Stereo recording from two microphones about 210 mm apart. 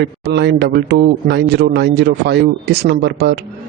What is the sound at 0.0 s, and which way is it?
Speech, 55° right (ahead or behind).